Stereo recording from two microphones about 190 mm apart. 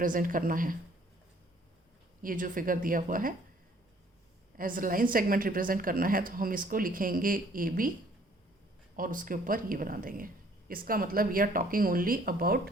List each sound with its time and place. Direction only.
0.0 s speech: 45° right (ahead or behind)
2.2 s speech: 45° right (ahead or behind)
4.5 s speech: 45° right (ahead or behind)
9.0 s speech: 45° right (ahead or behind)